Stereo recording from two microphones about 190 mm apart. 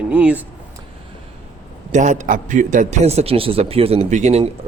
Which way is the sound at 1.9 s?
40° right (ahead or behind).